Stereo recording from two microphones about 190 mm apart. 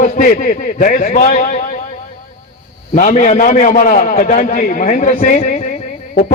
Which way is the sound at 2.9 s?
40° left (ahead or behind).